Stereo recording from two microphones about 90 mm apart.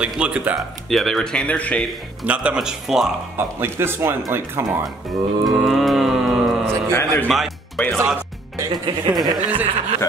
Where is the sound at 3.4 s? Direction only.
25° right (ahead or behind).